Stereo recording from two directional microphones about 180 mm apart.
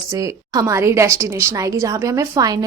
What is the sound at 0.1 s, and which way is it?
A woman's voice, 20° right (ahead or behind).